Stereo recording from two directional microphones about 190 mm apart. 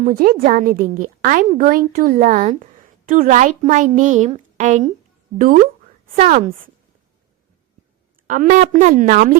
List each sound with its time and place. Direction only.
0.0 s a child's voice: 50° right (ahead or behind)
6.1 s speech: 45° right (ahead or behind)
8.3 s speech: 45° right (ahead or behind)